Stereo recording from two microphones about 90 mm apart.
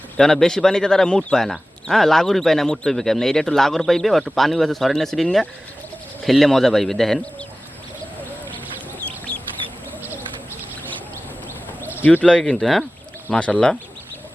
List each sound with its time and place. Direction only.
0.2 s speech: 5° left (ahead or behind)
11.8 s a sound: 20° right (ahead or behind)
12.0 s speech: 15° left (ahead or behind)